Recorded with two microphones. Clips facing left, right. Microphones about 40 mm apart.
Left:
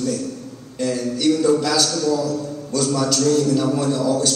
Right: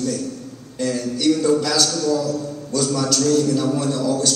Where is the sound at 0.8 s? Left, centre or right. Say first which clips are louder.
Even; centre.